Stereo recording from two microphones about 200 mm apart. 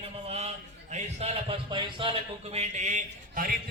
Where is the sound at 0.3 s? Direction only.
30° right (ahead or behind).